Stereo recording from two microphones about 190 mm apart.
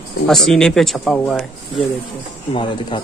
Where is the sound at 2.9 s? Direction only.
25° left (ahead or behind).